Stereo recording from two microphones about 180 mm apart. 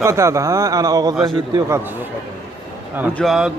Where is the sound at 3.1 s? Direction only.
Centre (ahead or behind).